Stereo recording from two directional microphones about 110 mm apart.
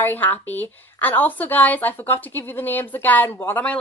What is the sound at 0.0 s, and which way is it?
A woman's voice, 15° left (ahead or behind).